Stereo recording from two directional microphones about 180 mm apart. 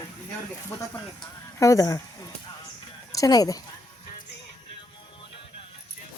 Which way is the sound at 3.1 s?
20° left (ahead or behind).